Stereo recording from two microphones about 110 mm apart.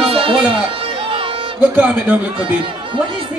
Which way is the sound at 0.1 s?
55° right (ahead or behind).